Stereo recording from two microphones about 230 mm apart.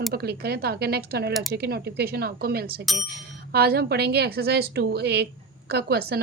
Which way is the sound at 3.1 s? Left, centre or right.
Right.